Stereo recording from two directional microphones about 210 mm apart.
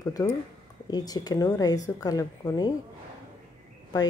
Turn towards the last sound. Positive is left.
turn(degrees=20)  # may be behind; listen again after turning